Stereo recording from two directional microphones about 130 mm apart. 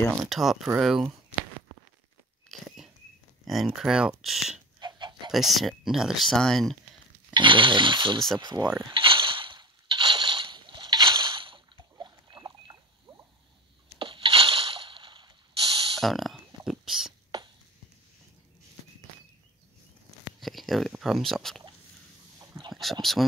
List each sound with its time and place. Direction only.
0.2 s speech: centre (ahead or behind)
2.5 s bird flight: centre (ahead or behind)
3.4 s speech: centre (ahead or behind)
4.7 s chicken: 35° right (ahead or behind)
5.3 s speech: centre (ahead or behind)
7.3 s speech: 40° right (ahead or behind)
8.8 s a sound: 40° right (ahead or behind)
13.9 s a sound: 40° right (ahead or behind)
16.0 s a sound: centre (ahead or behind)
20.2 s speech: centre (ahead or behind)
22.7 s boat: centre (ahead or behind)